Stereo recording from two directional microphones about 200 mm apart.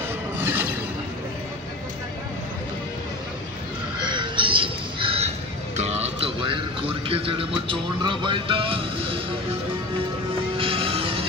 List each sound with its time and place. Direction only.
0.4 s a sound: 10° right (ahead or behind)
4.0 s crow: 25° right (ahead or behind)
5.8 s music: 30° right (ahead or behind)
10.6 s vehicle: 25° right (ahead or behind)